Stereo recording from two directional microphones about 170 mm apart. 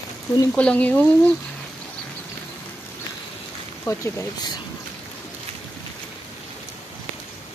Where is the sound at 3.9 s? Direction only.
15° left (ahead or behind).